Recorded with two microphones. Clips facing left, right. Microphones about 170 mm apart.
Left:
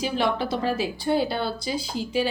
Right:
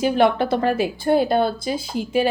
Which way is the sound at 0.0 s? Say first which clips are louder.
Right 7 dB; 55° right (ahead or behind).